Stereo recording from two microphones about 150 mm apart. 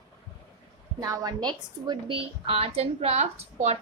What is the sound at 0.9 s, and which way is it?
A woman's voice, 25° right (ahead or behind).